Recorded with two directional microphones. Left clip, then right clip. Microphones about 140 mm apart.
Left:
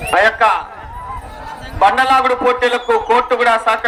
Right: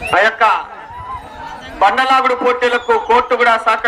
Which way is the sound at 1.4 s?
25° right (ahead or behind).